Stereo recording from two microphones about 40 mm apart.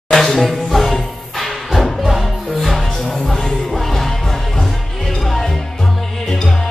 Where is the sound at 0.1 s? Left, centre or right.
Centre.